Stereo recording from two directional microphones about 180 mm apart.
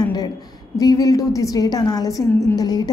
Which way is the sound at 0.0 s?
20° left (ahead or behind).